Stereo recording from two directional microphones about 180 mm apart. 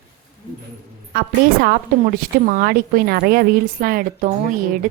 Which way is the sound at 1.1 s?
55° right (ahead or behind).